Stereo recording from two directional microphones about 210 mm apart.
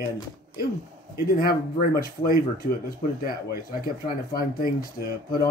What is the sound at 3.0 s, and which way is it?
Speech, 35° left (ahead or behind).